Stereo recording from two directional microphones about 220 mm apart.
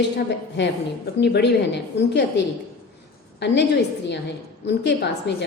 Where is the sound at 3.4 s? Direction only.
50° left (ahead or behind).